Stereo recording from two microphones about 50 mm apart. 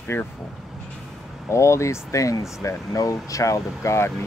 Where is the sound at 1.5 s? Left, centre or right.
Left.